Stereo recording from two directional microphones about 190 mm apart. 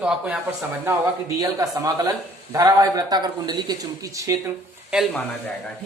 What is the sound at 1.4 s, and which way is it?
Speech, 20° right (ahead or behind).